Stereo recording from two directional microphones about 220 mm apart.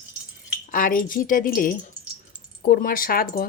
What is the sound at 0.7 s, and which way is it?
Speech, 40° left (ahead or behind).